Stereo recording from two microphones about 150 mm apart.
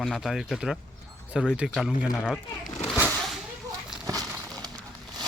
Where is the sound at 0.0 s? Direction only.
Centre (ahead or behind).